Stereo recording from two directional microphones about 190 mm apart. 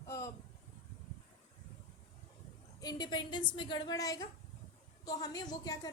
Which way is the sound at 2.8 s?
20° left (ahead or behind).